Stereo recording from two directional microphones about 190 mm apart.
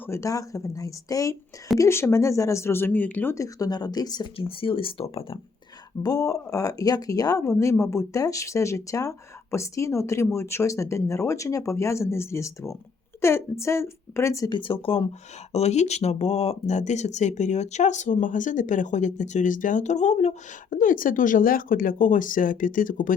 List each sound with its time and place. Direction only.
0.1 s speech: 15° left (ahead or behind); by 23.1 s 45° left (ahead or behind)